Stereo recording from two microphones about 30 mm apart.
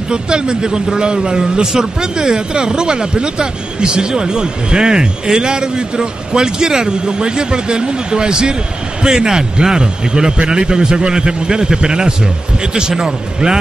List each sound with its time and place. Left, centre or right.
0.1 s speech: right